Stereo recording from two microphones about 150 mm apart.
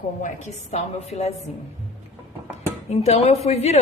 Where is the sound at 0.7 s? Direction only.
45° left (ahead or behind).